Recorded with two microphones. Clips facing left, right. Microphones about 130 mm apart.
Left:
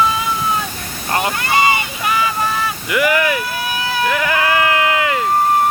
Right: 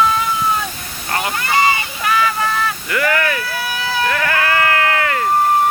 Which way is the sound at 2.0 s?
15° left (ahead or behind).